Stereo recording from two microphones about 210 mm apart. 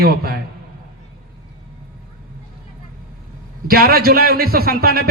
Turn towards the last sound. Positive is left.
turn(degrees=-45)  # may be behind; listen again after turning